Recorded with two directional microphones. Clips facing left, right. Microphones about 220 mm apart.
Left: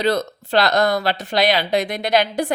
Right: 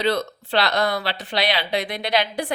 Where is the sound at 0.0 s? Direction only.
45° left (ahead or behind).